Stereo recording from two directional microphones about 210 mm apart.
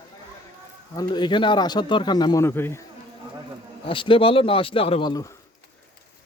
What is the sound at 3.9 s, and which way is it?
Speech, 25° left (ahead or behind).